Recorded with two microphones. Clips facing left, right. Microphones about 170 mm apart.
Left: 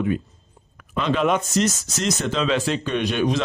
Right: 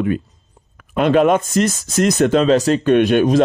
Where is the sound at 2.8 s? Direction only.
55° right (ahead or behind).